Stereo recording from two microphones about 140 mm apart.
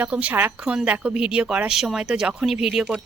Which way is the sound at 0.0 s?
10° right (ahead or behind).